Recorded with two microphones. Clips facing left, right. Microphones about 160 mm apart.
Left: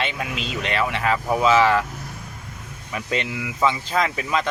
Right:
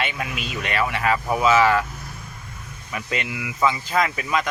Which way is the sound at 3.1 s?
30° left (ahead or behind).